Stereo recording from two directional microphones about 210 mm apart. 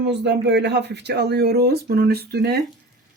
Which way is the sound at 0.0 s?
55° right (ahead or behind).